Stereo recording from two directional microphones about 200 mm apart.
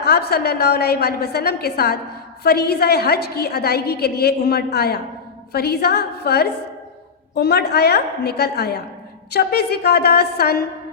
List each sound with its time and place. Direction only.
0.0 s a woman's voice: 50° left (ahead or behind)